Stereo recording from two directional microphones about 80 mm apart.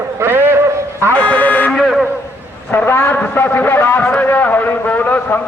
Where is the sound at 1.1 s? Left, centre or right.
Centre.